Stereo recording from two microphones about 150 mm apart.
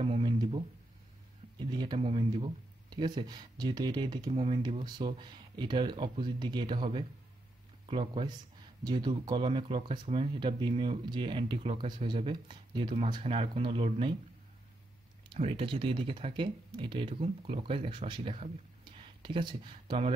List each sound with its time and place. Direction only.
0.0 s a sound: 35° right (ahead or behind)
1.7 s speech: 30° right (ahead or behind)
4.3 s speech: 40° right (ahead or behind)
4.6 s speech: 30° right (ahead or behind)
13.2 s speech: 45° right (ahead or behind)
15.3 s speech: 40° right (ahead or behind)
17.1 s speech: 45° right (ahead or behind)